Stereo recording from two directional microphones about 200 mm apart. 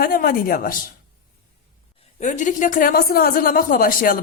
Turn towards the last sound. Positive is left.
turn(degrees=45)  # may be behind; listen again after turning